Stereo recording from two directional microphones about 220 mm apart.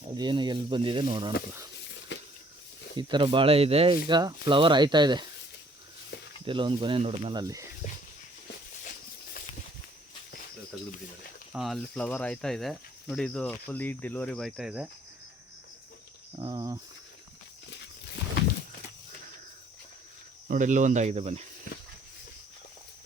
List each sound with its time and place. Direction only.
0.1 s speech: 20° right (ahead or behind)
2.1 s a sound: 55° left (ahead or behind)
2.9 s speech: 20° right (ahead or behind)
6.4 s speech: 25° right (ahead or behind)
11.5 s speech: centre (ahead or behind)
16.4 s speech: 20° right (ahead or behind)
20.5 s speech: 35° right (ahead or behind)